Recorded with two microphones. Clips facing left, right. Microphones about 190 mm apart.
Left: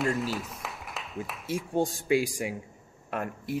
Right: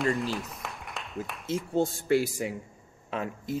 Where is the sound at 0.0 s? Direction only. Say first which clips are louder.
Right 1 dB; centre (ahead or behind).